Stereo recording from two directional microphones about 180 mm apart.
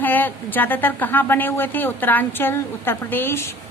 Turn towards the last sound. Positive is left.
turn(degrees=15)  # may be behind; listen again after turning